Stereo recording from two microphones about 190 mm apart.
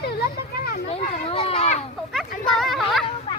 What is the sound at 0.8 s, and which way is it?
Children playing, 30° left (ahead or behind).